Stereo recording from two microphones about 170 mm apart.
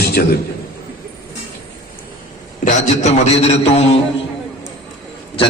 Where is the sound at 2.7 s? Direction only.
45° left (ahead or behind).